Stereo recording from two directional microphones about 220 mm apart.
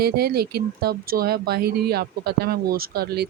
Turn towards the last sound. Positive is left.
turn(degrees=-45)  # may be behind; listen again after turning